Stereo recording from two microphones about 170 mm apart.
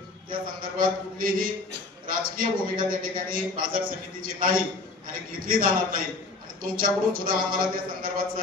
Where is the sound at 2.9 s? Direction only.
55° right (ahead or behind).